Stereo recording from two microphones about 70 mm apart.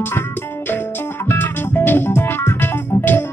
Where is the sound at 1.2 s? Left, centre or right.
Left.